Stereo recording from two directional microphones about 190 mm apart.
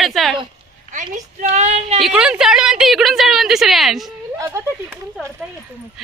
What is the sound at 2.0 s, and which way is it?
A woman's voice, centre (ahead or behind).